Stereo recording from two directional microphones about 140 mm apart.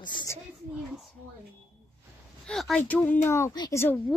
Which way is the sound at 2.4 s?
Centre (ahead or behind).